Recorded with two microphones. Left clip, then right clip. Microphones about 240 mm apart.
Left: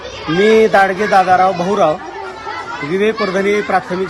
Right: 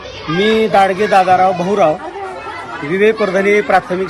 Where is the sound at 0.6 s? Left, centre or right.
Centre.